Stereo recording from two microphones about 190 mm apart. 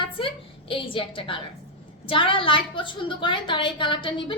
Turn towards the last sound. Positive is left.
turn(degrees=25)  # may be behind; listen again after turning